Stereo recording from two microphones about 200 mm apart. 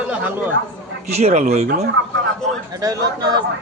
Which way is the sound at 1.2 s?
35° right (ahead or behind).